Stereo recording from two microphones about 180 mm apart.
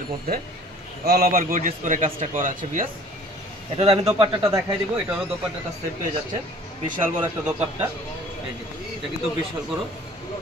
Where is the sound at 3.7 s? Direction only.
35° right (ahead or behind).